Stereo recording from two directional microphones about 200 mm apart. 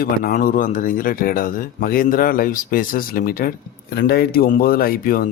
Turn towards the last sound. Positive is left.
turn(degrees=45)  # may be behind; listen again after turning